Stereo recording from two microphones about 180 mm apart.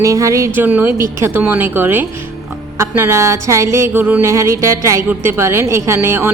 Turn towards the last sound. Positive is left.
turn(degrees=-15)  # may be behind; listen again after turning